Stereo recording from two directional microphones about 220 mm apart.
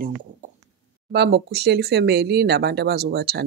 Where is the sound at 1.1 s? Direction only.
50° right (ahead or behind).